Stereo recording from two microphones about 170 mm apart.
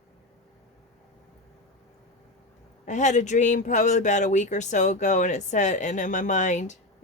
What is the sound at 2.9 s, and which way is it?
Speech, 45° left (ahead or behind).